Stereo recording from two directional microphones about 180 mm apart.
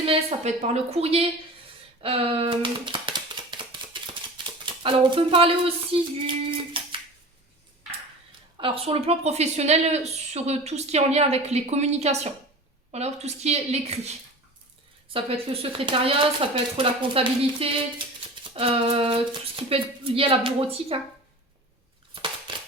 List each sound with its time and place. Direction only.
0.0 s speech: 35° right (ahead or behind)
2.0 s a sound: 30° right (ahead or behind)
8.5 s speech: 30° right (ahead or behind)
22.1 s crushing: 25° right (ahead or behind)